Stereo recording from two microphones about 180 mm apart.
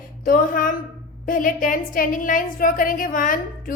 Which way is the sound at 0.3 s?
50° left (ahead or behind).